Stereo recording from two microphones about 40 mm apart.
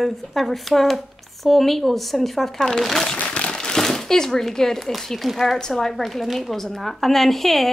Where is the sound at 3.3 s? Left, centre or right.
Left.